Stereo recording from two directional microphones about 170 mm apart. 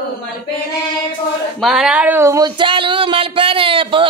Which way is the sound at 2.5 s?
30° right (ahead or behind).